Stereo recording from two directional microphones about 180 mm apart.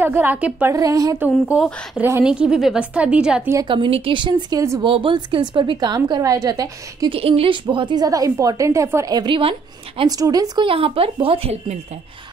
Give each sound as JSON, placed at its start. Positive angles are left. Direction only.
{"t": 0.0, "sound": "a woman's voice", "side_deg": -10}
{"t": 3.5, "sound": "a woman's voice", "side_deg": -25}
{"t": 7.2, "sound": "a woman's voice", "side_deg": -35}